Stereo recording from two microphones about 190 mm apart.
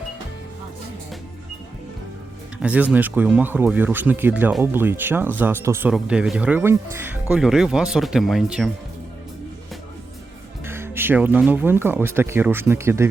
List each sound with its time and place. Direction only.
2.6 s speech: 5° right (ahead or behind)
10.7 s speech: 10° right (ahead or behind)